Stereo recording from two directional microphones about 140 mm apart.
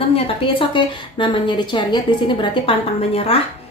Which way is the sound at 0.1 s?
40° left (ahead or behind).